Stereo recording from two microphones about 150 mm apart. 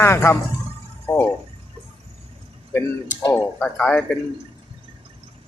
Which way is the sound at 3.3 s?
5° left (ahead or behind).